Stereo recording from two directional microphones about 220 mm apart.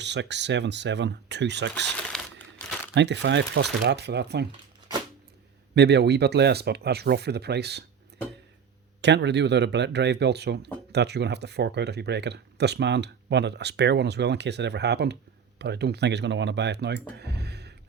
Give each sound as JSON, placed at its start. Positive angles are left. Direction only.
{"t": 0.0, "sound": "speech", "side_deg": -50}
{"t": 2.1, "sound": "crumpling", "side_deg": 5}
{"t": 2.9, "sound": "speech", "side_deg": -55}
{"t": 5.7, "sound": "speech", "side_deg": -50}
{"t": 9.0, "sound": "speech", "side_deg": -50}